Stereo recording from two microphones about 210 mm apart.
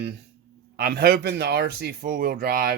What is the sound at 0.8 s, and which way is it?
Speech, 50° right (ahead or behind).